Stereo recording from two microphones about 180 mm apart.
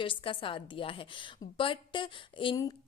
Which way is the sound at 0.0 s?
30° left (ahead or behind).